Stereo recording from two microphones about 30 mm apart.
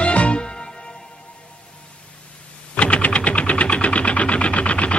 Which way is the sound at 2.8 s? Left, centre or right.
Left.